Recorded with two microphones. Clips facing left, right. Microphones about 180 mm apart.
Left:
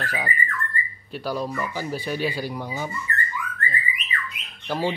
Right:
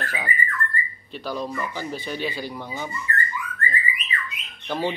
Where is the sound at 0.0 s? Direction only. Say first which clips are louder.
Left 2 dB; 10° left (ahead or behind).